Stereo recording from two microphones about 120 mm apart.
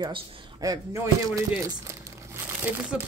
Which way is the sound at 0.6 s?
25° right (ahead or behind).